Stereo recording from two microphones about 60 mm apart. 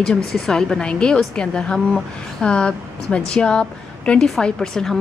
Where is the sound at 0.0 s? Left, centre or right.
Centre.